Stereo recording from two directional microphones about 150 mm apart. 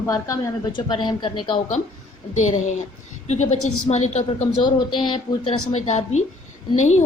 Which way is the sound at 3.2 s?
50° left (ahead or behind).